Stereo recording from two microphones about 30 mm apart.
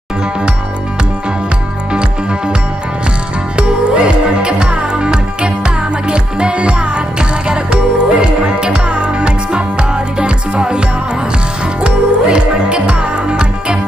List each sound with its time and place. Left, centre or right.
1.9 s music: right
3.5 s music: right
11.8 s music: right